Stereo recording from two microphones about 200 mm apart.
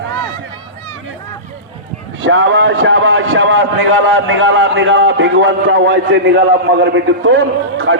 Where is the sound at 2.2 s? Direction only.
70° right (ahead or behind).